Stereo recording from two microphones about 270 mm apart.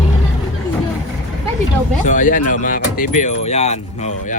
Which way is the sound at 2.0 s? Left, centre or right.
Left.